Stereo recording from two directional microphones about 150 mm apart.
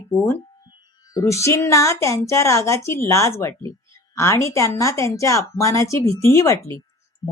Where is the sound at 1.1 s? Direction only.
20° left (ahead or behind).